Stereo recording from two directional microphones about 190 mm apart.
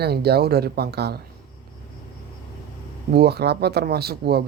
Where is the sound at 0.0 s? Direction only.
55° right (ahead or behind).